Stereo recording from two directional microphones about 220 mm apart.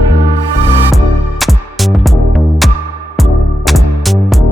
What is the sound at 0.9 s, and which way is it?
Music, centre (ahead or behind).